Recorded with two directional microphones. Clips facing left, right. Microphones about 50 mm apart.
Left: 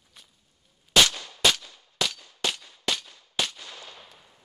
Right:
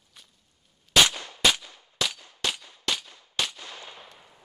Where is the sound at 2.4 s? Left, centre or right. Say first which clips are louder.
Left 1 dB; centre.